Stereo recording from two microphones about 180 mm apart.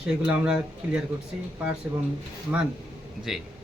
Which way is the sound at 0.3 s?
5° right (ahead or behind).